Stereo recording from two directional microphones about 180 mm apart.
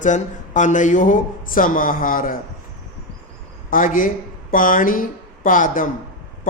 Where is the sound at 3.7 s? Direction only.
50° left (ahead or behind).